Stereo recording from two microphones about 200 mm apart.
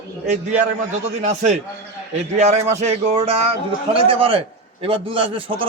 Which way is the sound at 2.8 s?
30° right (ahead or behind).